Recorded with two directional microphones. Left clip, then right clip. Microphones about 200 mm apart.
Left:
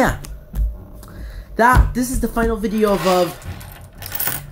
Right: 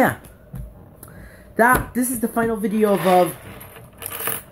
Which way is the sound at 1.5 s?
Centre (ahead or behind).